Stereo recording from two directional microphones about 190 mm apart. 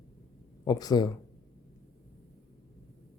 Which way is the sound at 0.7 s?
20° left (ahead or behind).